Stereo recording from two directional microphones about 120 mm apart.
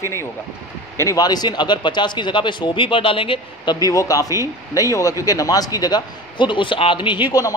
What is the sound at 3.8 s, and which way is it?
A man's voice, 30° left (ahead or behind).